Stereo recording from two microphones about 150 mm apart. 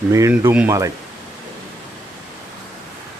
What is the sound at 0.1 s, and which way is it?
Speech, 20° right (ahead or behind).